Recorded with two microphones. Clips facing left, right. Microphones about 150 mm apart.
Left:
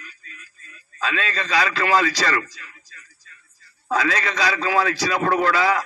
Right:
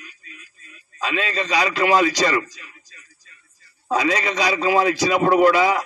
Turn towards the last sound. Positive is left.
turn(degrees=-15)  # may be behind; listen again after turning